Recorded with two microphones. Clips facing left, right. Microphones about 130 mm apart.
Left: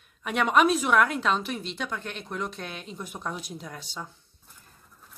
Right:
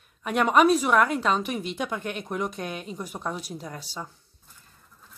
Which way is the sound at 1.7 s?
15° right (ahead or behind).